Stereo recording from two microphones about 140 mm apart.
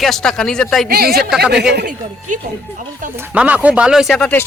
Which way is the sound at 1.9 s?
70° right (ahead or behind).